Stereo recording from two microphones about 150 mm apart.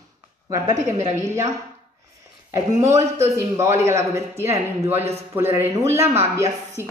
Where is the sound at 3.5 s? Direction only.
20° right (ahead or behind).